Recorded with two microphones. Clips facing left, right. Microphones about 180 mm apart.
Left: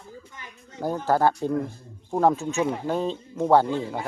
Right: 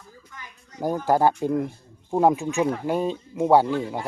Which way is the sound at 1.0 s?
15° right (ahead or behind).